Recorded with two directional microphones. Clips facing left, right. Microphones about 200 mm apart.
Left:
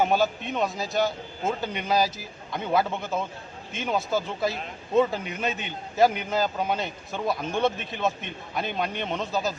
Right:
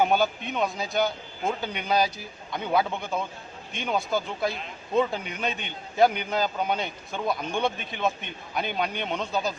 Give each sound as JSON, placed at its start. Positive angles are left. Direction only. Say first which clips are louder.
{"t": 0.0, "sound": "a man's voice", "louder": "even", "side_deg": 0}